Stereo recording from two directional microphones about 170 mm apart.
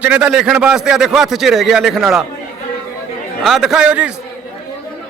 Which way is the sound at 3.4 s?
Centre (ahead or behind).